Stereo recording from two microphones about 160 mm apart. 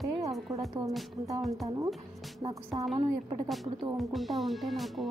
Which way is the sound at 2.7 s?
Centre (ahead or behind).